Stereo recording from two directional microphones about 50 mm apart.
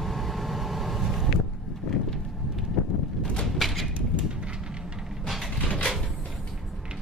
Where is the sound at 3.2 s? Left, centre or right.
Centre.